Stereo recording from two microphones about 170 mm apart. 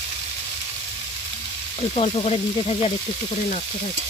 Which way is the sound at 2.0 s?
35° left (ahead or behind).